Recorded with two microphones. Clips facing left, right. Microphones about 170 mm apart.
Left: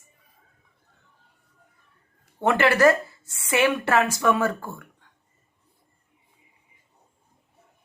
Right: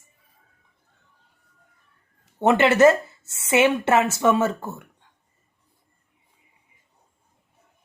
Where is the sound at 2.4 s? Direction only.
20° right (ahead or behind).